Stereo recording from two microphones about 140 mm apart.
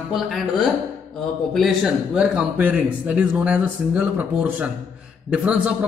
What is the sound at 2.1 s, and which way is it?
Speech, 5° right (ahead or behind).